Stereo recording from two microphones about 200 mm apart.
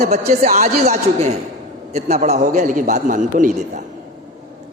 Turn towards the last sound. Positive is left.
turn(degrees=-40)  # may be behind; listen again after turning